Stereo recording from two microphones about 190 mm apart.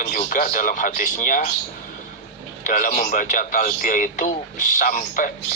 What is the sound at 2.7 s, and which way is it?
A man's voice, 45° left (ahead or behind).